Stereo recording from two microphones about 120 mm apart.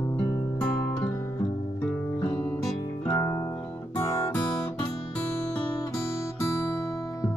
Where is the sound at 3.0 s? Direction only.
20° left (ahead or behind).